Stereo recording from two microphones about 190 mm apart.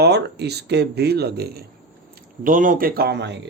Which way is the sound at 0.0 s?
60° right (ahead or behind).